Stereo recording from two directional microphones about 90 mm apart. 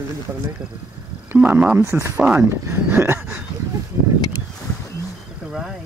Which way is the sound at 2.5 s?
25° right (ahead or behind).